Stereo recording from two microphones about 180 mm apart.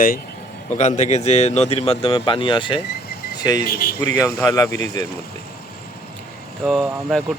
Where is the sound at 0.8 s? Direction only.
40° left (ahead or behind); by 3.6 s 20° left (ahead or behind).